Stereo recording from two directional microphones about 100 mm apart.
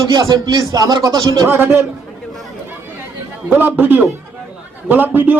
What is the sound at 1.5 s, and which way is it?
Speech, 20° right (ahead or behind).